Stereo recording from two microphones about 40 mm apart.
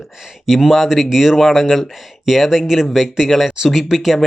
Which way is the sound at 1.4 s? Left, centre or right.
Centre.